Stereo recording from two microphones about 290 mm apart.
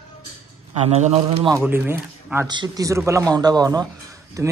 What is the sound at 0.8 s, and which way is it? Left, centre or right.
Speech, right.